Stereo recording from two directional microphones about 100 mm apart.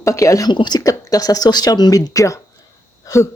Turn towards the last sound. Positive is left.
turn(degrees=30)  # may be behind; listen again after turning